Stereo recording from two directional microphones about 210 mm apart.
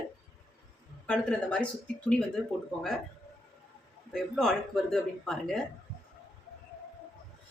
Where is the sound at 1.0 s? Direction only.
5° left (ahead or behind).